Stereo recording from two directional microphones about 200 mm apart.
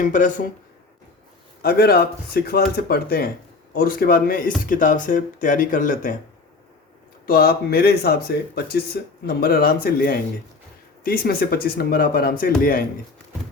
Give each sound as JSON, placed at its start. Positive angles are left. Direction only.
{"t": 0.0, "sound": "speech", "side_deg": 40}
{"t": 1.6, "sound": "speech", "side_deg": 50}
{"t": 7.3, "sound": "speech", "side_deg": 50}